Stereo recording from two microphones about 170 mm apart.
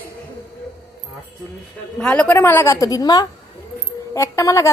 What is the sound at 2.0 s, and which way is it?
A woman's voice, 5° left (ahead or behind).